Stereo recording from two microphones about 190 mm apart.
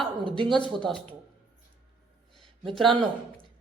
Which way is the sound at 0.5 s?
5° left (ahead or behind).